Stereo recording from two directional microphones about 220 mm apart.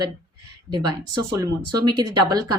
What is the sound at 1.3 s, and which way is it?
Speech, 15° right (ahead or behind).